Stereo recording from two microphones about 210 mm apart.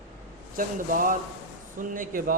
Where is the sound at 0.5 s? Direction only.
40° right (ahead or behind).